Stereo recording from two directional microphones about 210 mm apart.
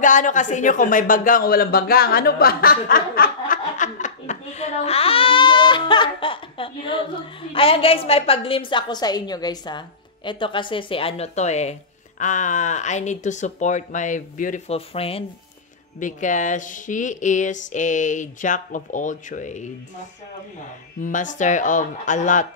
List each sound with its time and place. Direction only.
0.0 s a sound: 35° left (ahead or behind)
7.5 s a woman's voice: 25° left (ahead or behind)
21.0 s speech: 35° left (ahead or behind)